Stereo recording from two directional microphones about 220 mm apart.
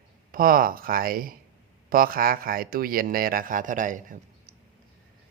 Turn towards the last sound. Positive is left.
turn(degrees=-35)  # may be behind; listen again after turning